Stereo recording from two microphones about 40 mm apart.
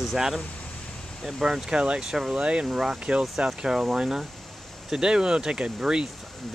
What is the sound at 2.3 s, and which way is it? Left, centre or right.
Speech, right.